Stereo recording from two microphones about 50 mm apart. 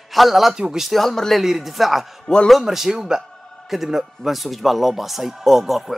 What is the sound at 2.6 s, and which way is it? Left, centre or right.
A man's voice, centre.